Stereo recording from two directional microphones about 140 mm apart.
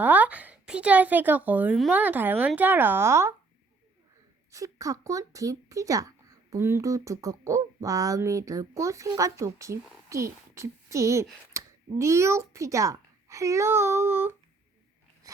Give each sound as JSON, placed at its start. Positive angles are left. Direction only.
{"t": 0.0, "sound": "speech", "side_deg": -10}
{"t": 4.5, "sound": "speech", "side_deg": -25}